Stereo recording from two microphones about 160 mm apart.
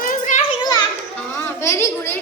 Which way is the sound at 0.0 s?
55° left (ahead or behind).